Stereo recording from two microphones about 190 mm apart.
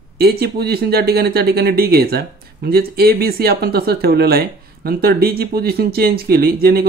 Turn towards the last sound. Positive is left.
turn(degrees=-50)  # may be behind; listen again after turning